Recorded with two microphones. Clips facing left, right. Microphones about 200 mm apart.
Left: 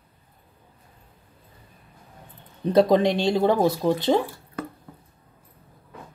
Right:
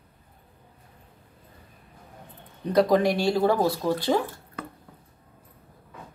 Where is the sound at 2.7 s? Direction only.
25° left (ahead or behind).